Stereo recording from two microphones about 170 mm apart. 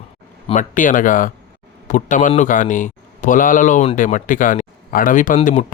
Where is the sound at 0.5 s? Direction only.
50° left (ahead or behind).